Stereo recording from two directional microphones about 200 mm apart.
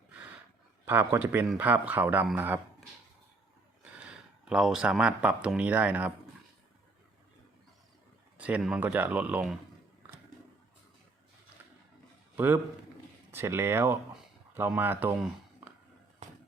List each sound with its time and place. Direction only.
0.9 s speech: 10° right (ahead or behind)
4.0 s speech: 5° right (ahead or behind)
8.4 s speech: 5° right (ahead or behind)
13.3 s speech: 10° right (ahead or behind)
16.2 s a sound: 35° right (ahead or behind)